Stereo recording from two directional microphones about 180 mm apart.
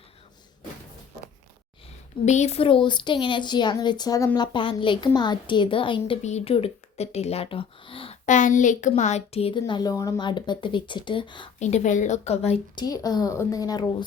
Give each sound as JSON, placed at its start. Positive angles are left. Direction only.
{"t": 2.2, "sound": "a woman's voice", "side_deg": 40}
{"t": 11.6, "sound": "speech", "side_deg": 40}
{"t": 12.8, "sound": "a woman's voice", "side_deg": 20}